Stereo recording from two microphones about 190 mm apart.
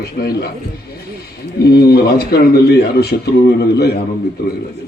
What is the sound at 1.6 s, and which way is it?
A man's voice, 55° left (ahead or behind).